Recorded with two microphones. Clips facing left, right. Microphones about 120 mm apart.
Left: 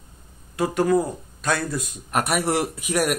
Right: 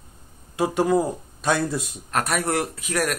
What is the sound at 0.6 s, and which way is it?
A man's voice, 5° right (ahead or behind).